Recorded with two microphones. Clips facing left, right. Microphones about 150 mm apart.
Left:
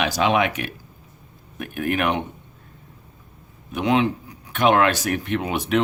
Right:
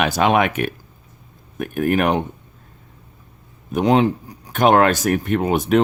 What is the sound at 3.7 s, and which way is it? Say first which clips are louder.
Speech: right 4 dB; 40° right (ahead or behind).